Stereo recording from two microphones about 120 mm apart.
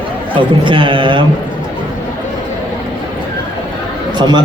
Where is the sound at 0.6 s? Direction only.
45° right (ahead or behind).